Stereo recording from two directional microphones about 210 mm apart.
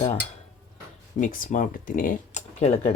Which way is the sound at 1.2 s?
40° left (ahead or behind).